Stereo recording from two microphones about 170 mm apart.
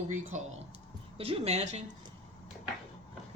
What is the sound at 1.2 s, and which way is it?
Speech, 35° right (ahead or behind).